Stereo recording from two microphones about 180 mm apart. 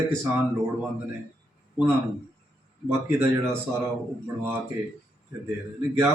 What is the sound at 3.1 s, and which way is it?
Speech, 15° right (ahead or behind).